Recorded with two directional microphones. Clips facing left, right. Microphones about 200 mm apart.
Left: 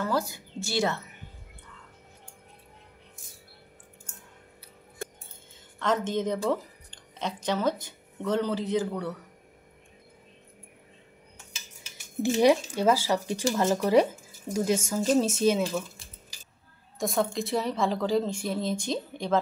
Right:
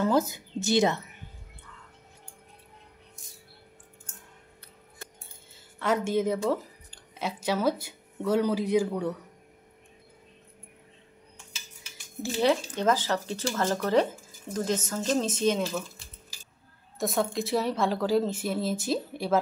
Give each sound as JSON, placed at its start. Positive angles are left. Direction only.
{"t": 0.0, "sound": "a woman's voice", "side_deg": -20}
{"t": 5.8, "sound": "a woman's voice", "side_deg": -10}
{"t": 12.4, "sound": "speech", "side_deg": 10}
{"t": 17.0, "sound": "speech", "side_deg": 0}